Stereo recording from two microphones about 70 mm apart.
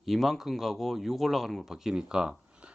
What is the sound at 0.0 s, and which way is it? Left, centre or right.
Speech, centre.